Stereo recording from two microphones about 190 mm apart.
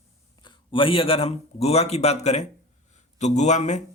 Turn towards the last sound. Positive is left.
turn(degrees=40)  # may be behind; listen again after turning